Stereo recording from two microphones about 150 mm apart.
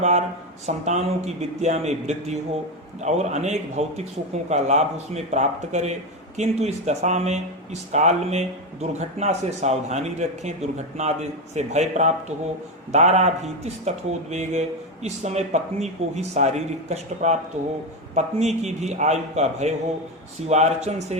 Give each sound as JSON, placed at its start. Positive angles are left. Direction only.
{"t": 0.0, "sound": "a man's voice", "side_deg": -50}